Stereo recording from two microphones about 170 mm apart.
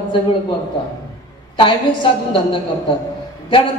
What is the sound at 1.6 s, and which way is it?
Speech, 30° left (ahead or behind).